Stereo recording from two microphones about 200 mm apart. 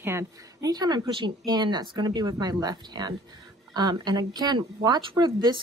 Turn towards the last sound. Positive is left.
turn(degrees=-20)  # may be behind; listen again after turning